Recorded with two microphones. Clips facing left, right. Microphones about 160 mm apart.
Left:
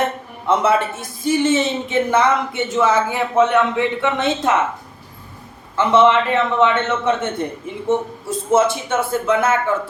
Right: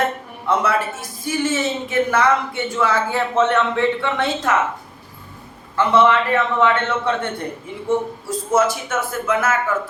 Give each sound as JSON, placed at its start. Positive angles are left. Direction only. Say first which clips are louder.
{"t": 0.4, "sound": "a man's voice", "louder": "left 3 dB", "side_deg": 25}
{"t": 5.7, "sound": "a man's voice", "louder": "left 2 dB", "side_deg": 20}
{"t": 8.5, "sound": "a man's voice", "louder": "left 2 dB", "side_deg": 25}